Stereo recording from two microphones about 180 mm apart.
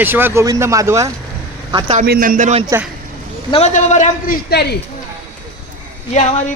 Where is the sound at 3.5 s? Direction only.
40° left (ahead or behind).